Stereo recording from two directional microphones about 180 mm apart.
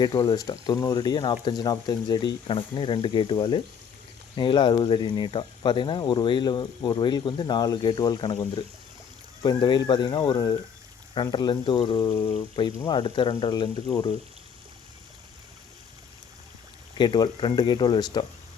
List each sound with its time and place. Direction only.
0.0 s speech: 20° left (ahead or behind)
17.0 s speech: 25° left (ahead or behind)